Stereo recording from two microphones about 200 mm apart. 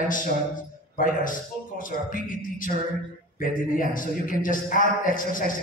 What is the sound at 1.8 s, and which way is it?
Speech, 40° left (ahead or behind).